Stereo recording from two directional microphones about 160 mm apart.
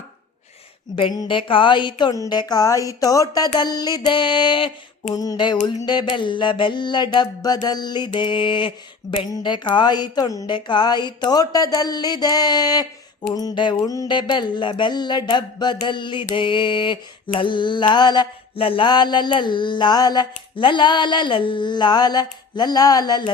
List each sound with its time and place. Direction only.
0.9 s music: 30° left (ahead or behind)